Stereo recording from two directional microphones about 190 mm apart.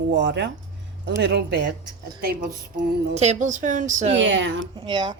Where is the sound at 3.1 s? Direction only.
35° right (ahead or behind).